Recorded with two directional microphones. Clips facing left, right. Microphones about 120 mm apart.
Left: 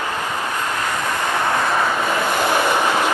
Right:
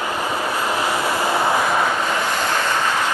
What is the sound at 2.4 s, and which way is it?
Vehicle, 15° left (ahead or behind).